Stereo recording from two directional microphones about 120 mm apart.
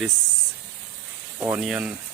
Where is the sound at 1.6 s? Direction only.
5° right (ahead or behind).